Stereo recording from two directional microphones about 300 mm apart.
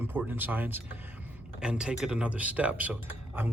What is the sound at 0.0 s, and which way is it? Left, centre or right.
Speech, centre.